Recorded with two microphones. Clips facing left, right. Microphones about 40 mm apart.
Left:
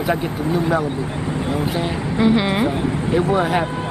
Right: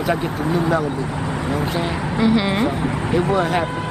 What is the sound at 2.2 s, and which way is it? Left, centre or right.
Speech, centre.